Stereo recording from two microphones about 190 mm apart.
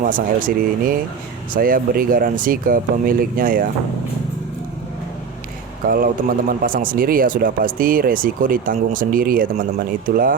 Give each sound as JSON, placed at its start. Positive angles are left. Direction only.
{"t": 0.0, "sound": "speech", "side_deg": -45}
{"t": 5.8, "sound": "speech", "side_deg": -50}